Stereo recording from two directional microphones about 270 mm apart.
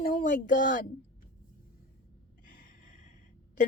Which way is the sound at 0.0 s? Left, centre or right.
Left.